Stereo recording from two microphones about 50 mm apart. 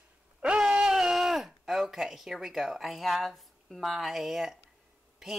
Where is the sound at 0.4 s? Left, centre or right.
Centre.